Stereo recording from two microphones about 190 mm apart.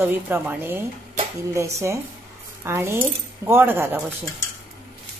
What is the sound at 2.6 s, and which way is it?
A woman's voice, 15° right (ahead or behind).